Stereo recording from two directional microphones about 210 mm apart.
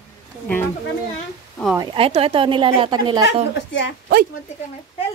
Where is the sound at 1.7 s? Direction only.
20° right (ahead or behind).